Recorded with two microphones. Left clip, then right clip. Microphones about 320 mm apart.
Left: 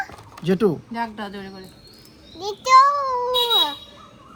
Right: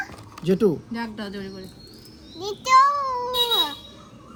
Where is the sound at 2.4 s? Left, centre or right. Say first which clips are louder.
Left 3 dB; centre.